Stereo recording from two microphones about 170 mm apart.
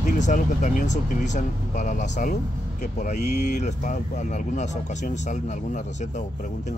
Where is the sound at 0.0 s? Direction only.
45° left (ahead or behind).